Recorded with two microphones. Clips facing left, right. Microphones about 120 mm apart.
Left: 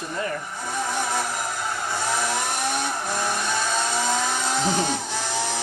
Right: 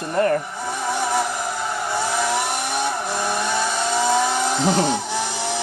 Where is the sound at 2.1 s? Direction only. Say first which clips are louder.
Right 4 dB; 15° right (ahead or behind).